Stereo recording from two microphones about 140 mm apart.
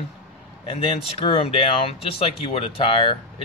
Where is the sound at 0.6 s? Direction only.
40° left (ahead or behind).